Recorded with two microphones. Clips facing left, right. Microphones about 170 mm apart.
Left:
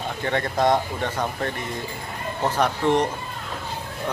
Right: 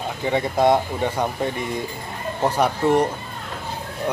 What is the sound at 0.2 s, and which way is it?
Speech, 10° right (ahead or behind).